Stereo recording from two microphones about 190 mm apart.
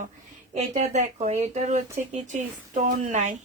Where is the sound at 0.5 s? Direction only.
40° right (ahead or behind).